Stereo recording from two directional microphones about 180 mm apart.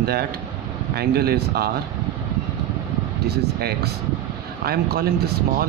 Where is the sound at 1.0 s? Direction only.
60° right (ahead or behind).